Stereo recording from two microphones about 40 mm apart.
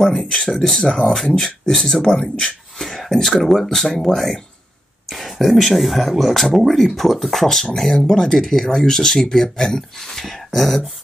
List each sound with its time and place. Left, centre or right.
0.1 s speech: left
0.5 s speech: centre